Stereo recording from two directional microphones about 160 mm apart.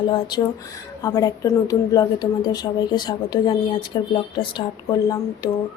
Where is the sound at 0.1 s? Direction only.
25° left (ahead or behind).